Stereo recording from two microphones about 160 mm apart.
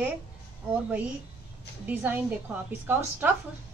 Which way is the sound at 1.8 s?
10° right (ahead or behind).